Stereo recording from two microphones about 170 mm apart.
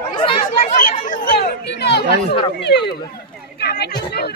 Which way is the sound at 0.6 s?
50° left (ahead or behind).